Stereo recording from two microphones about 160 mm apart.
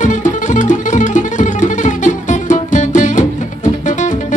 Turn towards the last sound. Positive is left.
turn(degrees=50)  # may be behind; listen again after turning